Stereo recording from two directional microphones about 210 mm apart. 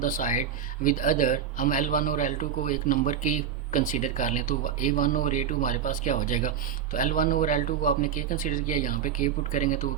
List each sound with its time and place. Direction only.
0.0 s a man's voice: 35° left (ahead or behind)